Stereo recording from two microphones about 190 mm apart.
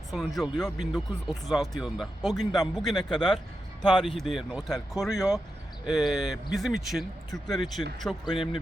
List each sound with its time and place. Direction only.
0.1 s speech: centre (ahead or behind)